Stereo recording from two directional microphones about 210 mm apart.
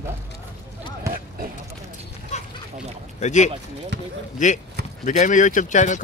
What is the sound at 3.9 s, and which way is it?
Speech, 55° right (ahead or behind).